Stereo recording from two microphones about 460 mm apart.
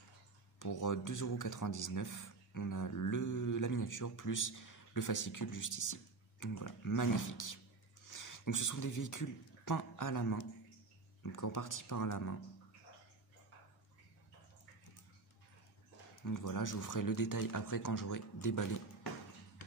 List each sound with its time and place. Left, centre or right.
0.6 s speech: left
16.3 s speech: left